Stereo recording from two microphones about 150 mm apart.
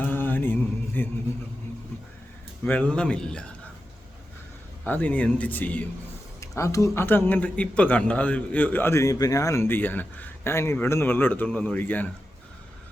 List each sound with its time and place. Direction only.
0.0 s mantra: 10° left (ahead or behind)
2.6 s speech: 10° left (ahead or behind)
4.9 s speech: 10° left (ahead or behind)